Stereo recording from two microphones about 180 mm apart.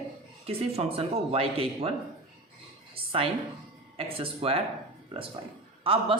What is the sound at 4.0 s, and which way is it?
Speech, 30° right (ahead or behind).